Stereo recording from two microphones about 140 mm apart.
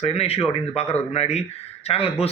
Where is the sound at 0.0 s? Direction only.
45° left (ahead or behind).